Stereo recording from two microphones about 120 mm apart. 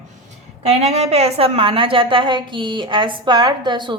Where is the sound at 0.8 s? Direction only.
65° right (ahead or behind).